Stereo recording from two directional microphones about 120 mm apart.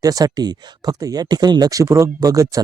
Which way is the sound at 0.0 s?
30° right (ahead or behind).